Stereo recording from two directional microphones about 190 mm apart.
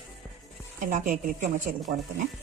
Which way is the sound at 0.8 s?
45° right (ahead or behind).